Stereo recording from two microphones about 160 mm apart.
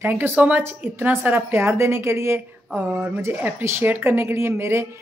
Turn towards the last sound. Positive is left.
turn(degrees=-15)  # may be behind; listen again after turning